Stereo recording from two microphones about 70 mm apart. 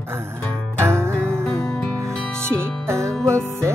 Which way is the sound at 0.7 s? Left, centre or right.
Right.